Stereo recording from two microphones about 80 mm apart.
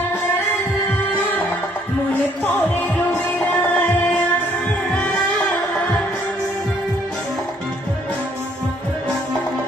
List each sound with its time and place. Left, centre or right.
2.4 s music: centre